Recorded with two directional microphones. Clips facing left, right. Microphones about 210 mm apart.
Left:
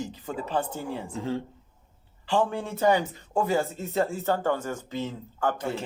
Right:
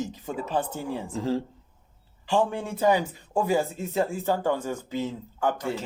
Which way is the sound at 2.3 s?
15° right (ahead or behind).